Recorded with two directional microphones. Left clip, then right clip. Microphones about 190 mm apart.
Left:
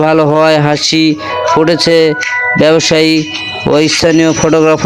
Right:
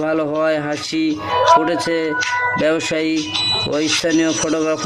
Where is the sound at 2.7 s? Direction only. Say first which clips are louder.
Left 10 dB; 40° left (ahead or behind).